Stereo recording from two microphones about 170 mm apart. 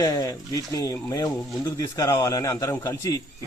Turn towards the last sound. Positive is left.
turn(degrees=20)  # may be behind; listen again after turning